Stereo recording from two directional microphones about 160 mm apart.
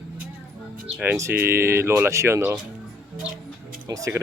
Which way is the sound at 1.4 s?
15° right (ahead or behind).